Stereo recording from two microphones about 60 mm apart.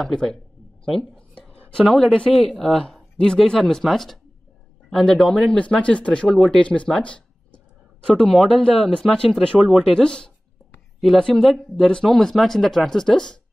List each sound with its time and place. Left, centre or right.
0.0 s speech: centre
0.8 s a sound: centre
1.7 s speech: centre
9.6 s speech: centre
9.8 s speech: centre